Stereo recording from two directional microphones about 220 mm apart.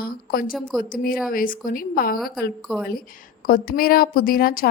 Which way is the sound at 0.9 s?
40° left (ahead or behind).